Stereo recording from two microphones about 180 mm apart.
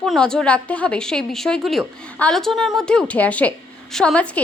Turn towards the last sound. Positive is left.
turn(degrees=5)  # may be behind; listen again after turning